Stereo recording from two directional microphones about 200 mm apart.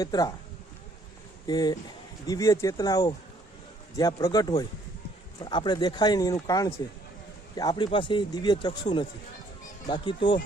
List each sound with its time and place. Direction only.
0.0 s speech: 20° left (ahead or behind)
1.5 s speech: 20° left (ahead or behind)